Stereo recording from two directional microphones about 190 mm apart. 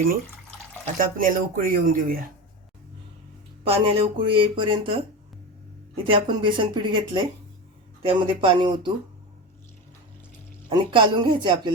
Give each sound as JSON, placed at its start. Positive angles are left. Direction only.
{"t": 0.9, "sound": "speech", "side_deg": -45}
{"t": 3.6, "sound": "speech", "side_deg": -30}
{"t": 6.1, "sound": "speech", "side_deg": -25}
{"t": 10.7, "sound": "speech", "side_deg": -25}